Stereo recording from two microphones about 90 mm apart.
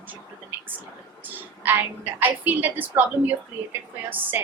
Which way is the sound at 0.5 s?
20° right (ahead or behind).